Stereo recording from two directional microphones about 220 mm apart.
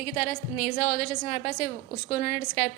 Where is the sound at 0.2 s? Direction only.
35° left (ahead or behind).